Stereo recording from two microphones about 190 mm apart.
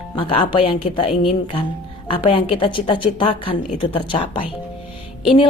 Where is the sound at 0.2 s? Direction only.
30° left (ahead or behind).